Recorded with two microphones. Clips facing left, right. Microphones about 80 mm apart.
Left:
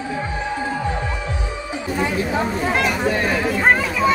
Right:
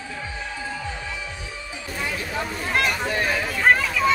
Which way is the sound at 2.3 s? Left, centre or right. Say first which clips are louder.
Left 7 dB; left.